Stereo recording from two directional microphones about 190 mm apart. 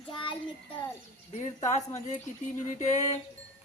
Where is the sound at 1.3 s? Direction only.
40° left (ahead or behind).